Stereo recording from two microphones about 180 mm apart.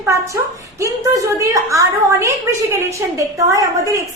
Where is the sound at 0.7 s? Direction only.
15° right (ahead or behind).